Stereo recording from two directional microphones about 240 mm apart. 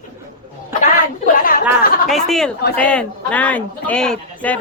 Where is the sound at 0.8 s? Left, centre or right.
Left.